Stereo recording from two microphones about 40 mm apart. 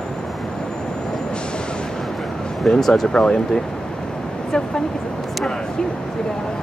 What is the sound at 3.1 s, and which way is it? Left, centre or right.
Speech, left.